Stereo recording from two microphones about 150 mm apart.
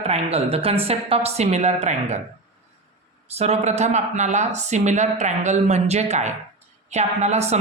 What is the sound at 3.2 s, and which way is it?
Speech, 45° right (ahead or behind).